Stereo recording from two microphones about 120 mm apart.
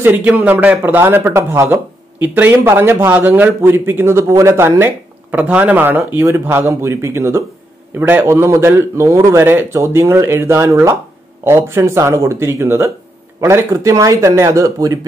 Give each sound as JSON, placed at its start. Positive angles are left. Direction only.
{"t": 0.0, "sound": "speech", "side_deg": -10}